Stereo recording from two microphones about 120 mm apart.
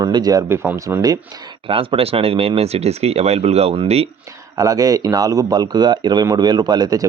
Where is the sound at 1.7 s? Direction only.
50° right (ahead or behind).